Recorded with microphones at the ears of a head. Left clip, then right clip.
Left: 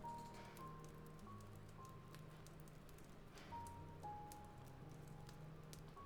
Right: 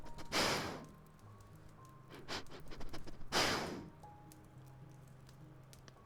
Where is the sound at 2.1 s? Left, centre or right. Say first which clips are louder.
Right 15 dB; right.